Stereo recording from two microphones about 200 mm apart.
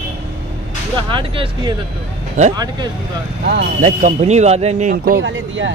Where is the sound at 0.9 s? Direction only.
25° right (ahead or behind).